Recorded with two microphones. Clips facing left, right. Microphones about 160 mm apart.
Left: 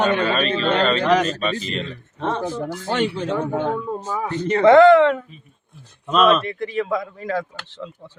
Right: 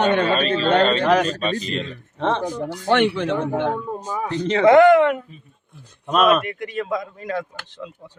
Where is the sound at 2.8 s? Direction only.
65° right (ahead or behind).